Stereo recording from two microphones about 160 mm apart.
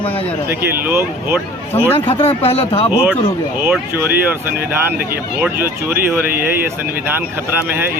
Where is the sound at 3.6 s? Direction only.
10° right (ahead or behind).